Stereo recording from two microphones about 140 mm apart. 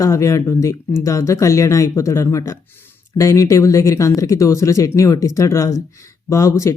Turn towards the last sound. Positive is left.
turn(degrees=20)  # may be behind; listen again after turning